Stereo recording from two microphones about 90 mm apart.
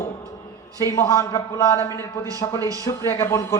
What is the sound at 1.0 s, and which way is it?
Speech, 35° left (ahead or behind).